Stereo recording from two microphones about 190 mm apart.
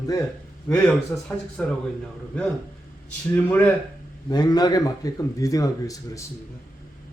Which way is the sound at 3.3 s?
10° left (ahead or behind).